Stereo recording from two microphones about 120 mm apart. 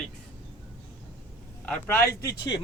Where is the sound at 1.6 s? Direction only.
10° left (ahead or behind).